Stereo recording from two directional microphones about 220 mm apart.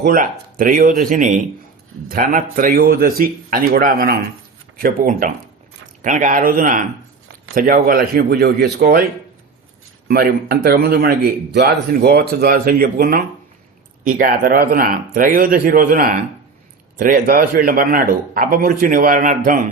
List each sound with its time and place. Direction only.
0.0 s a man's voice: 40° right (ahead or behind)
10.1 s a man's voice: 45° right (ahead or behind)